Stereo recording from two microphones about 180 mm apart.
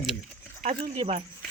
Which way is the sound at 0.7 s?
35° right (ahead or behind).